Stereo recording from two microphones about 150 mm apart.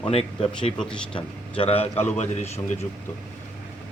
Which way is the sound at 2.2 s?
50° left (ahead or behind).